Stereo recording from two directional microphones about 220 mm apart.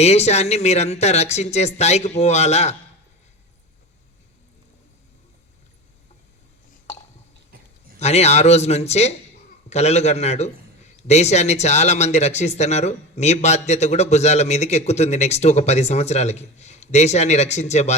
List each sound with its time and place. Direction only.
0.0 s speech: 30° left (ahead or behind)
7.9 s a man's voice: 30° left (ahead or behind)